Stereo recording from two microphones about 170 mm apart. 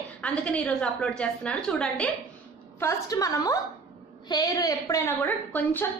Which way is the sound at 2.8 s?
20° left (ahead or behind).